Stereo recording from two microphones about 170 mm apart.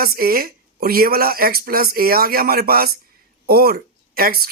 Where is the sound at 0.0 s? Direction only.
60° right (ahead or behind).